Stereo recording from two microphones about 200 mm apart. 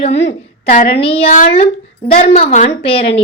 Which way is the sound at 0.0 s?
30° left (ahead or behind).